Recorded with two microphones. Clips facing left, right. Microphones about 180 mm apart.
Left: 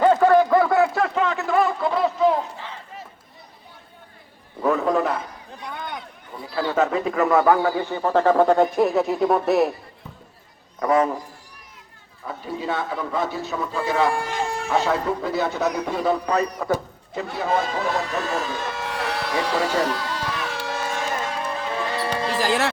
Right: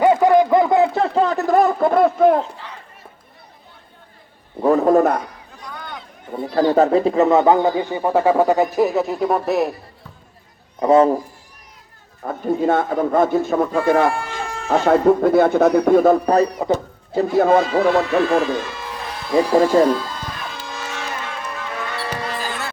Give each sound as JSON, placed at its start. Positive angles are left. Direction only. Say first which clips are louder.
{"t": 0.0, "sound": "a sound", "louder": "right 2 dB", "side_deg": -15}
{"t": 4.6, "sound": "a man's voice", "louder": "right 7 dB", "side_deg": -40}
{"t": 5.7, "sound": "a sound", "louder": "left 1 dB", "side_deg": 20}
{"t": 6.3, "sound": "speech", "louder": "right 8 dB", "side_deg": -50}
{"t": 10.8, "sound": "a man's voice", "louder": "right 7 dB", "side_deg": -30}
{"t": 12.2, "sound": "a man's voice", "louder": "right 10 dB", "side_deg": -50}
{"t": 16.6, "sound": "speech", "louder": "right 4 dB", "side_deg": -25}
{"t": 17.3, "sound": "a man's voice", "louder": "right 9 dB", "side_deg": -50}
{"t": 18.6, "sound": "electric shaver", "louder": "left 3 dB", "side_deg": 70}
{"t": 22.4, "sound": "music", "louder": "left 6 dB", "side_deg": 90}